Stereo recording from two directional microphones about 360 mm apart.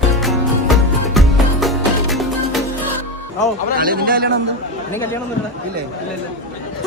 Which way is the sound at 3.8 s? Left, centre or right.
Right.